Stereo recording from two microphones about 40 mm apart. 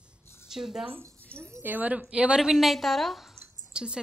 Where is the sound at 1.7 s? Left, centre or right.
Right.